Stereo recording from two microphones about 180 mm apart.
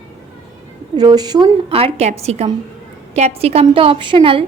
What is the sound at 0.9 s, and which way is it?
A woman's voice, 25° right (ahead or behind).